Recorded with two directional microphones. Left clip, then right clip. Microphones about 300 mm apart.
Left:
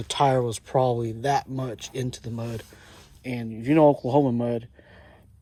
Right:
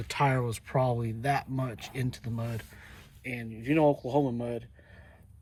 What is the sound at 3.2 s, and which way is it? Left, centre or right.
Speech, centre.